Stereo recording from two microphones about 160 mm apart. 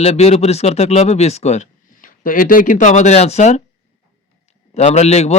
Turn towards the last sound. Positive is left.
turn(degrees=40)  # may be behind; listen again after turning